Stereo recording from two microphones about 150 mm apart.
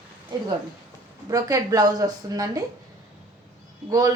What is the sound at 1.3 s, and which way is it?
Speech, 25° right (ahead or behind).